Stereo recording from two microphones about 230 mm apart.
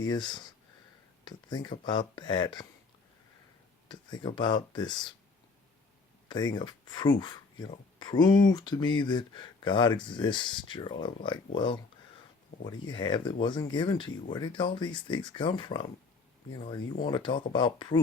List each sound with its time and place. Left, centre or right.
0.0 s speech: centre
3.8 s speech: centre
6.2 s speech: centre
12.9 s speech: left